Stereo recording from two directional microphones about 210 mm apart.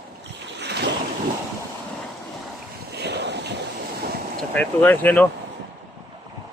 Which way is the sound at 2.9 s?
50° right (ahead or behind).